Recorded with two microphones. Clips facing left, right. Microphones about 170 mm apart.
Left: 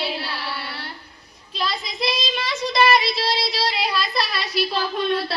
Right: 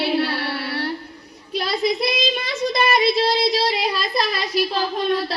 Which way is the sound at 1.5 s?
65° right (ahead or behind).